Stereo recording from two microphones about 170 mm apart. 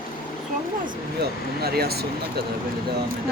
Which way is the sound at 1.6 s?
65° right (ahead or behind).